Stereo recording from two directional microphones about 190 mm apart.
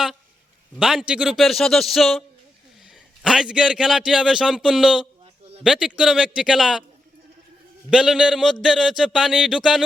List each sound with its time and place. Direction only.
0.8 s a man's voice: 5° right (ahead or behind)
5.2 s a sound: 30° right (ahead or behind)
5.6 s a man's voice: 5° right (ahead or behind)
7.9 s a man's voice: 5° right (ahead or behind)